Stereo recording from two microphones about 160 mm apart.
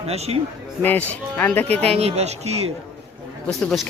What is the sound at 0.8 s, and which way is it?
Speech, 10° left (ahead or behind).